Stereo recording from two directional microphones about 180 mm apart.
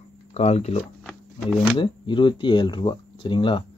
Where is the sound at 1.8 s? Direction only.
25° left (ahead or behind).